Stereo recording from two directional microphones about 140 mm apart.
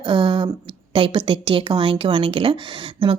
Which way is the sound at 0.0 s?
35° right (ahead or behind).